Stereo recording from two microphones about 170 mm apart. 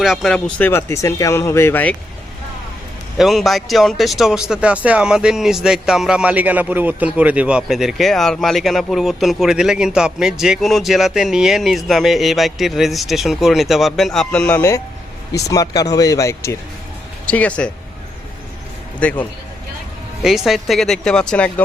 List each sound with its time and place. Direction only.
0.0 s speech: centre (ahead or behind)
3.2 s speech: centre (ahead or behind); by 16.6 s 20° left (ahead or behind)
17.2 s speech: 10° left (ahead or behind)
18.9 s speech: 10° left (ahead or behind)
20.2 s speech: centre (ahead or behind)